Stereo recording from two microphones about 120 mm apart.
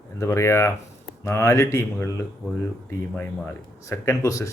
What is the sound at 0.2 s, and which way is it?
Speech, 25° left (ahead or behind).